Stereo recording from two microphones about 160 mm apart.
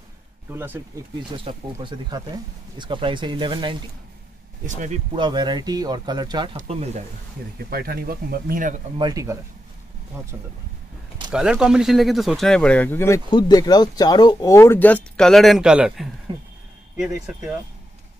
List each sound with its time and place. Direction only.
1.3 s speech: 30° right (ahead or behind)
4.6 s speech: 50° right (ahead or behind)
5.1 s speech: 30° right (ahead or behind)
6.5 s speech: 45° right (ahead or behind)
7.7 s speech: 70° right (ahead or behind)
8.9 s speech: 25° right (ahead or behind)
11.3 s speech: 5° right (ahead or behind); by 13.2 s 15° left (ahead or behind)
13.3 s speech: 25° left (ahead or behind); by 16.1 s 5° right (ahead or behind)
16.3 s speech: 30° right (ahead or behind)
17.0 s speech: 5° right (ahead or behind)